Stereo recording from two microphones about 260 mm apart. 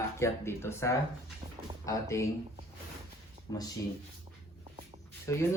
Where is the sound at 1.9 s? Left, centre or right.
Centre.